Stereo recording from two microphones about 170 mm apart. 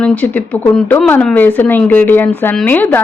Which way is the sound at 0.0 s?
10° left (ahead or behind).